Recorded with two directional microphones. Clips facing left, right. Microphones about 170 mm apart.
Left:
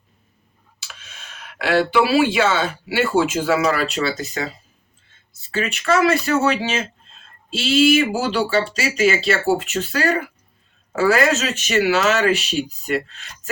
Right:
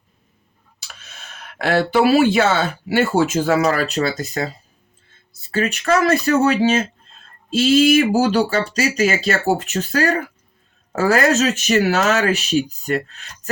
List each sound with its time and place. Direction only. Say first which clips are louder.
0.9 s speech: right 4 dB; 45° right (ahead or behind)
5.5 s speech: right 2 dB; 40° right (ahead or behind)